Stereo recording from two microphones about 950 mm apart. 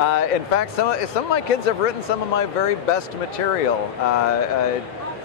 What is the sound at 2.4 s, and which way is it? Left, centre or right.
Speech, left.